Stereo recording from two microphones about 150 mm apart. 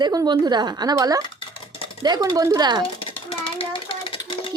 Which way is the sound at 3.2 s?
35° left (ahead or behind).